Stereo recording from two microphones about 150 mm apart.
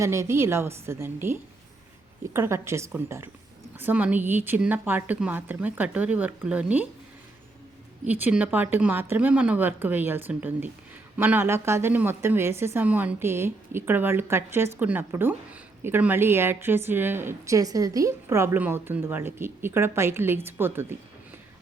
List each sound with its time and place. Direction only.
0.0 s speech: 20° right (ahead or behind)
8.0 s speech: 10° right (ahead or behind)